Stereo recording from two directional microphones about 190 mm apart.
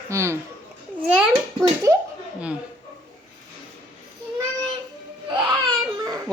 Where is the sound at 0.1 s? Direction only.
15° right (ahead or behind).